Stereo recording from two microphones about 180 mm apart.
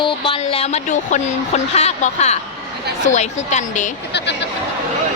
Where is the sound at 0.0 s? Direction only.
30° left (ahead or behind).